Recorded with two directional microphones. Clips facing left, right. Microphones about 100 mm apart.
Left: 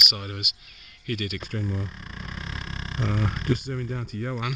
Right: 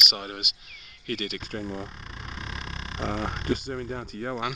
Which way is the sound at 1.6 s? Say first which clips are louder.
Left 1 dB; 45° right (ahead or behind).